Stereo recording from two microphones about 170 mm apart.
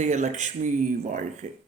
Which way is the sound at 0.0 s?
45° right (ahead or behind).